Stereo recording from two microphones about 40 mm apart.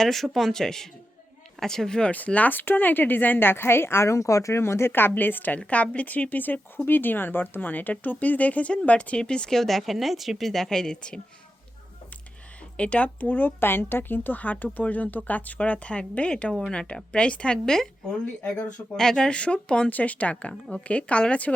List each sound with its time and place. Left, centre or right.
0.0 s speech: centre
2.0 s speech: left
2.5 s a woman's voice: left
5.1 s speech: left
5.5 s speech: left
9.5 s a woman's voice: centre
12.7 s speech: left
13.2 s speech: left
17.7 s speech: centre
19.9 s speech: left